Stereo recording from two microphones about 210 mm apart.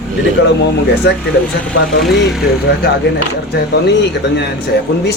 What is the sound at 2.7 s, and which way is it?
Speech, 50° left (ahead or behind).